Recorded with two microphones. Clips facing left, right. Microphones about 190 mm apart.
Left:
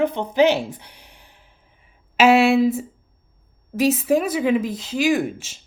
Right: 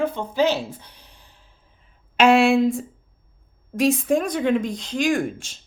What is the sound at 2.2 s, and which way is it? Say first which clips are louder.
A woman's voice: left 1 dB; 5° left (ahead or behind).